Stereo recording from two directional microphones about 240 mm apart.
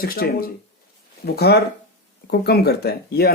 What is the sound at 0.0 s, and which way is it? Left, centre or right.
Speech, left.